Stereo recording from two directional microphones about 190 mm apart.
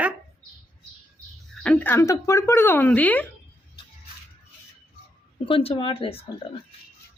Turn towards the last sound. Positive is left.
turn(degrees=30)  # may be behind; listen again after turning